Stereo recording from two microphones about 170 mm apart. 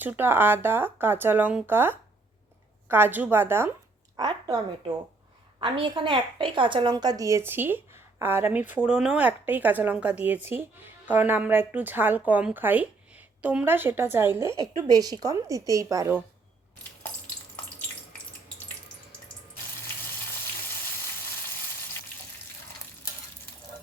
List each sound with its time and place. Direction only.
0.0 s a woman's voice: 10° right (ahead or behind)